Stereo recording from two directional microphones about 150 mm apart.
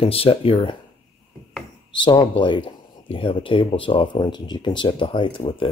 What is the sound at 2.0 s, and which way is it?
Speech, 30° left (ahead or behind).